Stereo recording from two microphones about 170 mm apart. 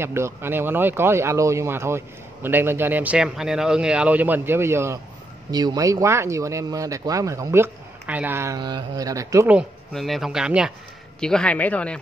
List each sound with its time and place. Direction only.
0.0 s speech: 15° right (ahead or behind)
9.5 s speech: centre (ahead or behind)